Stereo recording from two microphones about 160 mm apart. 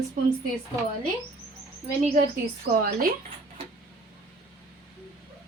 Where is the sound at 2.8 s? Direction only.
65° right (ahead or behind).